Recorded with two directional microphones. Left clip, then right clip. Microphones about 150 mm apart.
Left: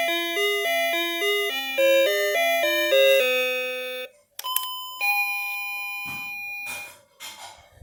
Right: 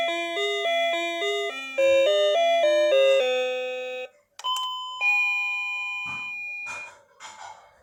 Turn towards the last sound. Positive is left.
turn(degrees=45)  # may be behind; listen again after turning